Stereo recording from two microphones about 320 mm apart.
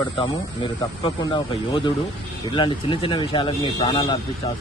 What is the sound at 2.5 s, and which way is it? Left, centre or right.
Speech, centre.